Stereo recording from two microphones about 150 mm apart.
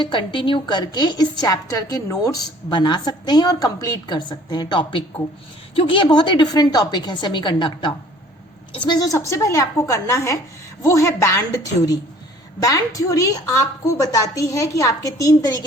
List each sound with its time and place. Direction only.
0.0 s a woman's voice: 35° left (ahead or behind)